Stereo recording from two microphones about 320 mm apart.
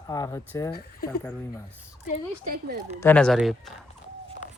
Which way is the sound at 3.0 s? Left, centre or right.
Centre.